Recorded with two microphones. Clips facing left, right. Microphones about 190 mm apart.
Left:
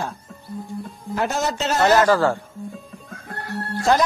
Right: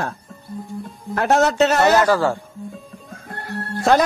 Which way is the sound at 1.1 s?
65° right (ahead or behind).